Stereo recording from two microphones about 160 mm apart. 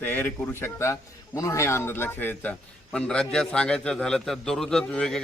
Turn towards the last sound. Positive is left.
turn(degrees=5)  # may be behind; listen again after turning